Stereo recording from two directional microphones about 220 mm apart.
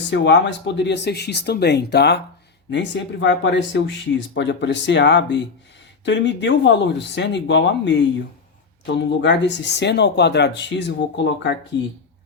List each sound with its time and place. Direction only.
0.1 s speech: 50° left (ahead or behind)